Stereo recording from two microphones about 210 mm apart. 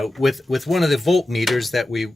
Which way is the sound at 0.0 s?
Centre (ahead or behind).